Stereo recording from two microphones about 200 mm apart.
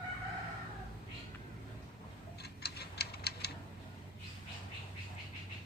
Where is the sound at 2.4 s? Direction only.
55° left (ahead or behind).